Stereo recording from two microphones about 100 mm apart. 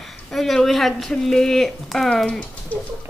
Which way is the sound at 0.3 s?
Centre (ahead or behind).